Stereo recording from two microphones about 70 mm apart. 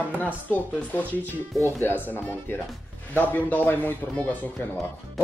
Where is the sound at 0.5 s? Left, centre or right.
Left.